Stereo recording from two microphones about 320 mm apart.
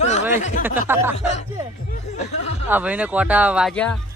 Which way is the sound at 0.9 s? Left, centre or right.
Centre.